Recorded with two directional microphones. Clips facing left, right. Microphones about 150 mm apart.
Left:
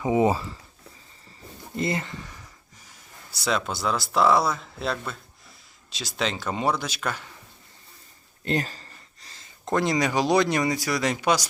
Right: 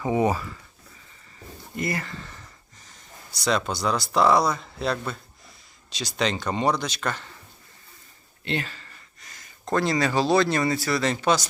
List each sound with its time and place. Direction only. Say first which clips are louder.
0.0 s speech: left 1 dB; 20° left (ahead or behind)
1.7 s a man's voice: left 2 dB; 25° left (ahead or behind); by 7.3 s 10° left (ahead or behind)
8.4 s speech: left 3 dB; 40° left (ahead or behind); by 11.4 s 10° left (ahead or behind)